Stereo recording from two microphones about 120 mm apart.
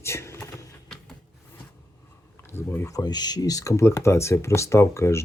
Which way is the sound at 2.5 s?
20° left (ahead or behind).